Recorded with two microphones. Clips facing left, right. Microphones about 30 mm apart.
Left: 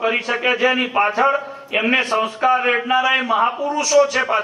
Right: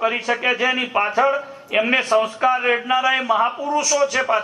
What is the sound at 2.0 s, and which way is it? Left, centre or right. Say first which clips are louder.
Speech: right 1 dB; left.